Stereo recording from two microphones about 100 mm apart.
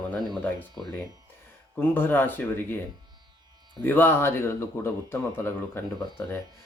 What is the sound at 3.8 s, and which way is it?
Speech, 20° left (ahead or behind).